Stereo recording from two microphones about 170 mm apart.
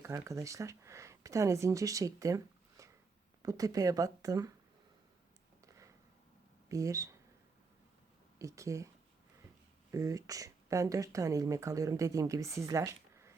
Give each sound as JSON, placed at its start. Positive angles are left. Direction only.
{"t": 0.0, "sound": "speech", "side_deg": -15}
{"t": 5.6, "sound": "a sound", "side_deg": -20}
{"t": 6.7, "sound": "speech", "side_deg": -20}
{"t": 8.4, "sound": "speech", "side_deg": -20}
{"t": 9.9, "sound": "speech", "side_deg": -20}